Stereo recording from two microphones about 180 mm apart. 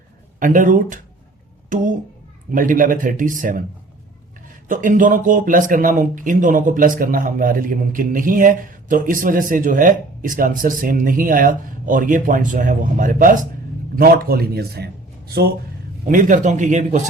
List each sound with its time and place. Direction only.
0.3 s speech: 45° right (ahead or behind)
4.7 s a man's voice: 45° right (ahead or behind)
16.0 s speech: 45° right (ahead or behind)